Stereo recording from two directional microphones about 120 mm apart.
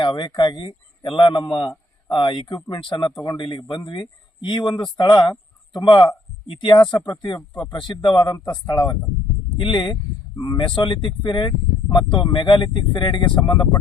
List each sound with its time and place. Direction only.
0.0 s a man's voice: 40° left (ahead or behind)